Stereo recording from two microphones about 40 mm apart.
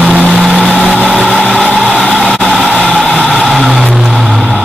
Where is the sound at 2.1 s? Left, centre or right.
Centre.